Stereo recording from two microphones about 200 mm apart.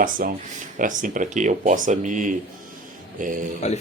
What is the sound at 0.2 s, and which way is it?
Music, 45° right (ahead or behind).